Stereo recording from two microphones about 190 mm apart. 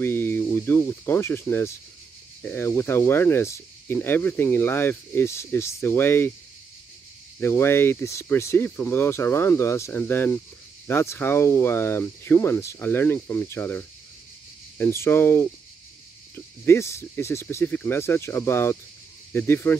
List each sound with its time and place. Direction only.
0.0 s speech: 10° left (ahead or behind)
7.3 s speech: 10° left (ahead or behind)